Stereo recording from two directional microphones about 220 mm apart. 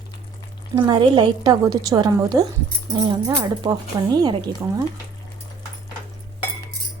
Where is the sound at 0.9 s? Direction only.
20° right (ahead or behind).